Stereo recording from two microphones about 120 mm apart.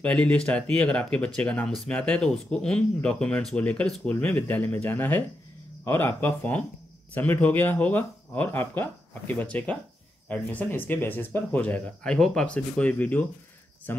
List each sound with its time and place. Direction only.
0.0 s speech: 10° left (ahead or behind)